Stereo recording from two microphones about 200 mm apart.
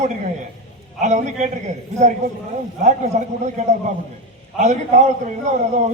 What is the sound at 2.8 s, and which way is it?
Speech, 35° right (ahead or behind).